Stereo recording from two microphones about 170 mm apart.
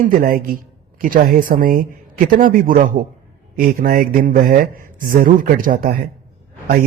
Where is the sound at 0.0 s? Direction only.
55° right (ahead or behind).